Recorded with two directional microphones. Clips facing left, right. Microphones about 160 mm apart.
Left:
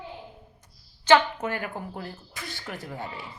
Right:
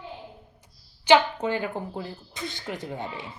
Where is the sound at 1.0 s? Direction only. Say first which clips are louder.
Right 1 dB; 15° right (ahead or behind).